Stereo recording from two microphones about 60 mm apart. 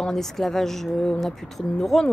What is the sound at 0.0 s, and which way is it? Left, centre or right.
Speech, centre.